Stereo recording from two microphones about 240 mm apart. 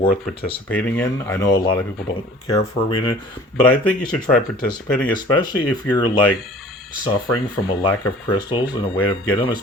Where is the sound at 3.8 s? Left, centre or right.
Centre.